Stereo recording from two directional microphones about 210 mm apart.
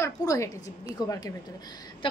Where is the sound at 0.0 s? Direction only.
15° left (ahead or behind).